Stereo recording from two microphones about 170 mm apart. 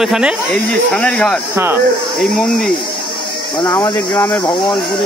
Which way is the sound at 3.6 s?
25° left (ahead or behind).